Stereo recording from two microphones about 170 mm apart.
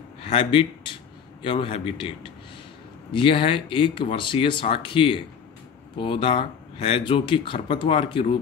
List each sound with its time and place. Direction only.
0.2 s speech: 35° left (ahead or behind)
3.1 s speech: 30° left (ahead or behind)